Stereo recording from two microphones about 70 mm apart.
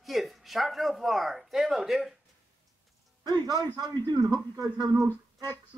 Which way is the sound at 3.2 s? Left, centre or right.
Right.